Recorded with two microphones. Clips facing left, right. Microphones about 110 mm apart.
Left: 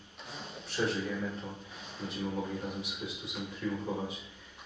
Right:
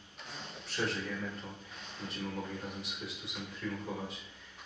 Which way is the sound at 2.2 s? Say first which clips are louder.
Left 5 dB; 15° left (ahead or behind).